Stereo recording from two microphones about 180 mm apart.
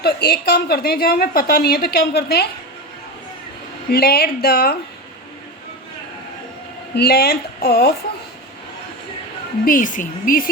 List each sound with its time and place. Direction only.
0.0 s a woman's voice: 60° left (ahead or behind)
3.8 s a woman's voice: 60° left (ahead or behind)
6.9 s a woman's voice: 60° left (ahead or behind)
9.6 s speech: 50° left (ahead or behind)